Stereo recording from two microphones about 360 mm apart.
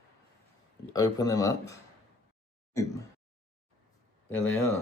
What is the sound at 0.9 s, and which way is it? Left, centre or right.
Speech, centre.